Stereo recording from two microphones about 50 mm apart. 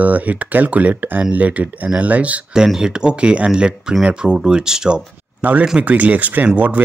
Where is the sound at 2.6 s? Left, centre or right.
Centre.